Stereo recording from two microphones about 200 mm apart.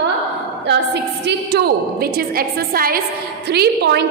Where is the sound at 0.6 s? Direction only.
55° right (ahead or behind).